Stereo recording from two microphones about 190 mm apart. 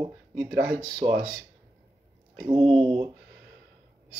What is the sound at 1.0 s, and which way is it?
Speech, 30° right (ahead or behind).